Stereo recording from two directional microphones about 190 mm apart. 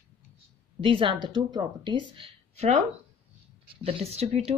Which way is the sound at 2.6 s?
35° right (ahead or behind).